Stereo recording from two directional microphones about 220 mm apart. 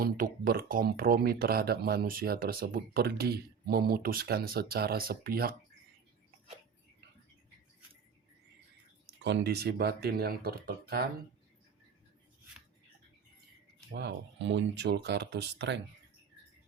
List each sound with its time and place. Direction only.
0.0 s speech: 40° right (ahead or behind)
9.2 s speech: 50° right (ahead or behind)
13.9 s speech: 50° right (ahead or behind)